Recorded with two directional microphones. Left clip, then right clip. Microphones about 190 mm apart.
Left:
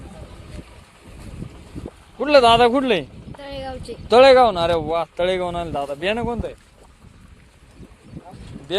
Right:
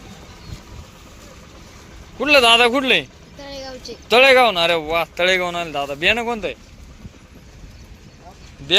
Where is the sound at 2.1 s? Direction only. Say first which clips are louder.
Even; 25° left (ahead or behind).